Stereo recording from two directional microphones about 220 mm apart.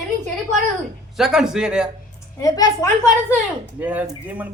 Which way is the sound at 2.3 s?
15° left (ahead or behind).